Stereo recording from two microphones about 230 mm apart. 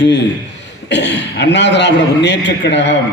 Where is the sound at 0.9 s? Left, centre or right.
Left.